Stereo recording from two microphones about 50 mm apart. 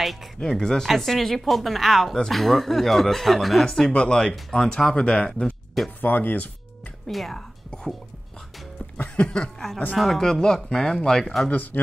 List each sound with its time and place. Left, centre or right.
0.4 s speech: centre
4.7 s speech: left
5.9 s speech: left
7.1 s speech: centre
8.9 s a sound: left
9.4 s speech: centre
11.5 s speech: left